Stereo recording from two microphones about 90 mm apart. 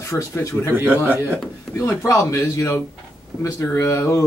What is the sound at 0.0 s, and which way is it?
Speech, 35° left (ahead or behind).